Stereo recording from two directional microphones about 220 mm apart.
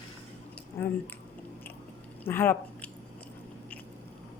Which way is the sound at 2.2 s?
10° left (ahead or behind).